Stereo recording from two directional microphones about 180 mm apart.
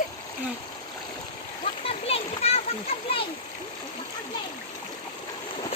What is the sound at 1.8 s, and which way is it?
Splash, 35° left (ahead or behind).